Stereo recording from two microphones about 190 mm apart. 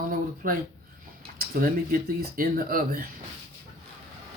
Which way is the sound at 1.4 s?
50° right (ahead or behind).